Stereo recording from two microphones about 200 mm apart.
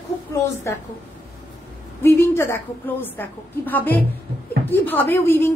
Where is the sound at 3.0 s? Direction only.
10° left (ahead or behind).